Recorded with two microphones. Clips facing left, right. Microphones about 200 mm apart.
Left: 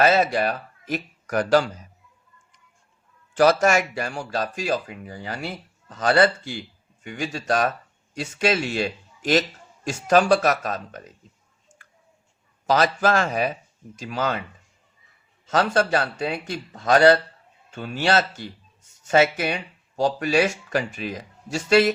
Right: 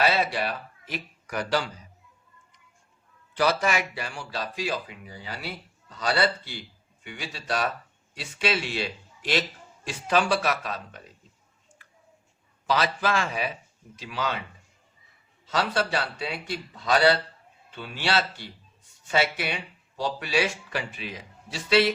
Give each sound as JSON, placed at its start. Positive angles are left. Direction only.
{"t": 0.0, "sound": "speech", "side_deg": 45}
{"t": 3.3, "sound": "speech", "side_deg": 45}
{"t": 11.7, "sound": "a sound", "side_deg": 45}
{"t": 12.6, "sound": "speech", "side_deg": 45}
{"t": 15.4, "sound": "speech", "side_deg": 45}